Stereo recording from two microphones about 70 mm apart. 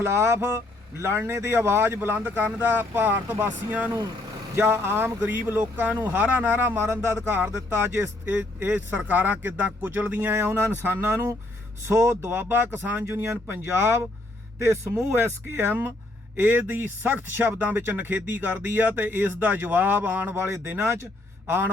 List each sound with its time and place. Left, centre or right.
0.0 s speech: right